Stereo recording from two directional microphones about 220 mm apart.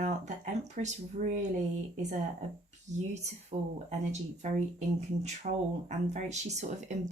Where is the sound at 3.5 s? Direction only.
25° right (ahead or behind).